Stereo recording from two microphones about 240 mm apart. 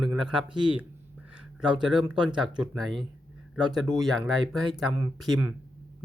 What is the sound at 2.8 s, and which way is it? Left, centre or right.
Speech, centre.